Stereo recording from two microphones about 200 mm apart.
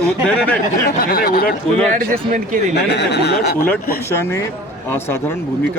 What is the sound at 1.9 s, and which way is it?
Speech, 45° right (ahead or behind).